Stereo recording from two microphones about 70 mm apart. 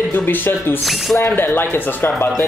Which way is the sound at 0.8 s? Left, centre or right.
Centre.